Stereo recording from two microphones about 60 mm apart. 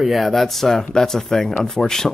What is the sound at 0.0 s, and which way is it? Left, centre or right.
Speech, centre.